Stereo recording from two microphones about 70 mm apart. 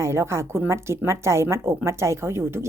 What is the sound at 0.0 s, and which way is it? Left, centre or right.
A woman's voice, right.